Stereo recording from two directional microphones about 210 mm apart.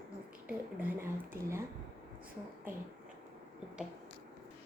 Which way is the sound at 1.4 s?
45° right (ahead or behind).